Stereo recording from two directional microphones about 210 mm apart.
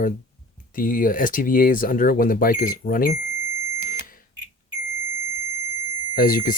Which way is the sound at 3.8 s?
40° left (ahead or behind).